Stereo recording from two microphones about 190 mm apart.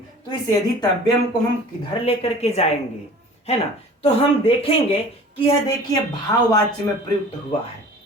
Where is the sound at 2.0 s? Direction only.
30° left (ahead or behind).